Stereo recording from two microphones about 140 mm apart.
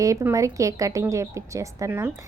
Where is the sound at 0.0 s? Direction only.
20° right (ahead or behind).